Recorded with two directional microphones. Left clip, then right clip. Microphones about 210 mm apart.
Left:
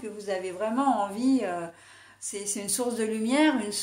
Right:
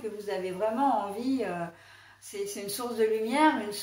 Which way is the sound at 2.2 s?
50° left (ahead or behind).